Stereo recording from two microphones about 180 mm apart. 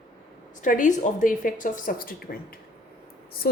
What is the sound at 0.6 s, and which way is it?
A woman's voice, 45° left (ahead or behind).